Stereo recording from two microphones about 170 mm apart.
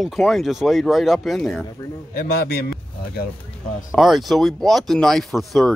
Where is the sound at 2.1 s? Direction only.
65° left (ahead or behind).